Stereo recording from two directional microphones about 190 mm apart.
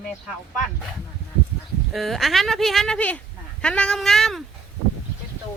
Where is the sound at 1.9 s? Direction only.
Centre (ahead or behind).